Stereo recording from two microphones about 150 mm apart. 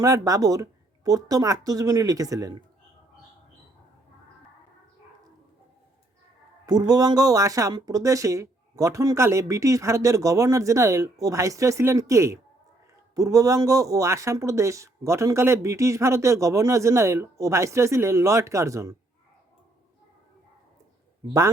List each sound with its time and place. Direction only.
0.0 s speech: 20° right (ahead or behind)
6.7 s speech: 25° right (ahead or behind)